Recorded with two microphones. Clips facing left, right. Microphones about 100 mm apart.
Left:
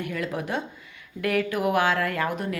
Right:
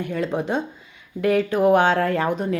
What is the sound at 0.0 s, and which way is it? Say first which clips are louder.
A woman's voice: right 5 dB; 25° right (ahead or behind).